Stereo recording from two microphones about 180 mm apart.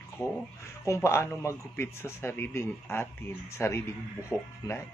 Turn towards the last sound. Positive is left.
turn(degrees=15)  # may be behind; listen again after turning